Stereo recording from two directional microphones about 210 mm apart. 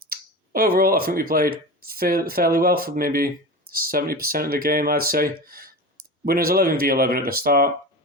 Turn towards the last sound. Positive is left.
turn(degrees=-45)  # may be behind; listen again after turning